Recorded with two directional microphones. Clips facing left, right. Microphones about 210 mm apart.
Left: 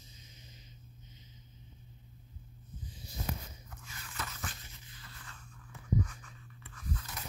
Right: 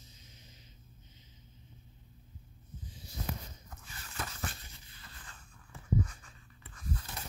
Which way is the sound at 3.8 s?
35° right (ahead or behind).